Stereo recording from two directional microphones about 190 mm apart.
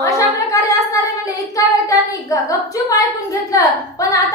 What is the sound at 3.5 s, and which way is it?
Child singing, 15° left (ahead or behind).